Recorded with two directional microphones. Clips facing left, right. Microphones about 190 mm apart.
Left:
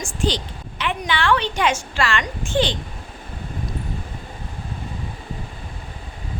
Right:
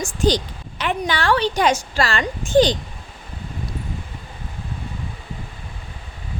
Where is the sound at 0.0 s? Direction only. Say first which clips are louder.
Right 4 dB; 40° right (ahead or behind).